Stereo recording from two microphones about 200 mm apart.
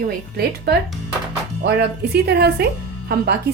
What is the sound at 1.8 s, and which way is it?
Speech, 55° right (ahead or behind).